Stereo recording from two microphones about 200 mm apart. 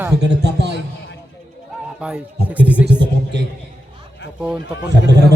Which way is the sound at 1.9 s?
5° right (ahead or behind).